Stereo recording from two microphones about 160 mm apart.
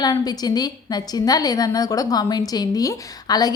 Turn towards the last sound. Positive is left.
turn(degrees=25)  # may be behind; listen again after turning